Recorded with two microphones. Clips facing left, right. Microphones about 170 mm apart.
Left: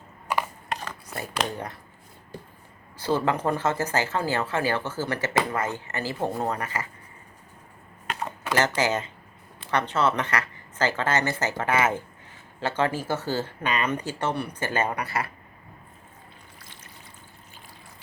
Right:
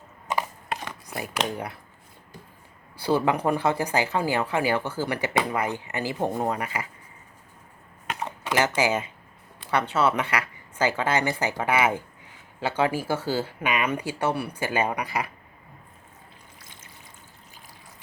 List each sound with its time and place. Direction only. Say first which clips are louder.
0.8 s a sound: right 1 dB; 15° right (ahead or behind)
3.0 s speech: right 2 dB; 10° right (ahead or behind)
8.5 s speech: right 1 dB; 10° right (ahead or behind)